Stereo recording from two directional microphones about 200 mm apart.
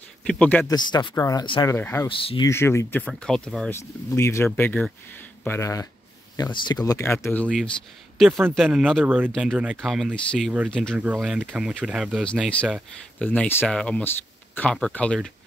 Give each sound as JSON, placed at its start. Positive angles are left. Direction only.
{"t": 0.2, "sound": "speech", "side_deg": 5}
{"t": 0.7, "sound": "speech", "side_deg": 20}
{"t": 2.0, "sound": "speech", "side_deg": 25}
{"t": 2.5, "sound": "speech", "side_deg": 15}
{"t": 4.1, "sound": "speech", "side_deg": 15}
{"t": 8.2, "sound": "speech", "side_deg": -10}